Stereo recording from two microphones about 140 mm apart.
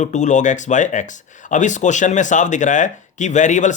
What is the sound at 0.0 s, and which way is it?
Speech, 60° left (ahead or behind).